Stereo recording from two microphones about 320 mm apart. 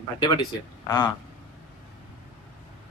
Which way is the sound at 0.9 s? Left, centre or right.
Centre.